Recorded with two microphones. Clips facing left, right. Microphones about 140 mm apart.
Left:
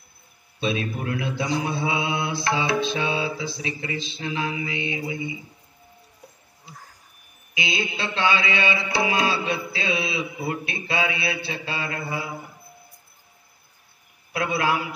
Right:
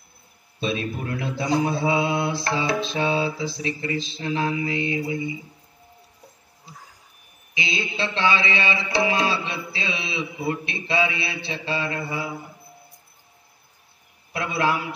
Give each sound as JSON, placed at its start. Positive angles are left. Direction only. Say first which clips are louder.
{"t": 0.6, "sound": "mantra", "louder": "even", "side_deg": -35}
{"t": 6.6, "sound": "a sound", "louder": "even", "side_deg": -5}
{"t": 7.9, "sound": "mantra", "louder": "right 2 dB", "side_deg": -30}
{"t": 14.3, "sound": "a man's voice", "louder": "even", "side_deg": -30}